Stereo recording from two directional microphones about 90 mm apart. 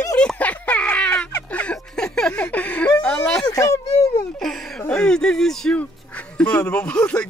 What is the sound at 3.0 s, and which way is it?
Speech, 10° left (ahead or behind).